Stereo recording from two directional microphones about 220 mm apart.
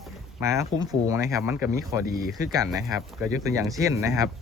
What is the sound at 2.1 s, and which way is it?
Speech, 40° left (ahead or behind).